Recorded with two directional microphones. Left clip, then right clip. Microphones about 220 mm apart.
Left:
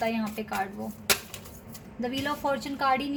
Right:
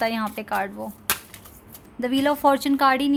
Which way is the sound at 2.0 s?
50° right (ahead or behind).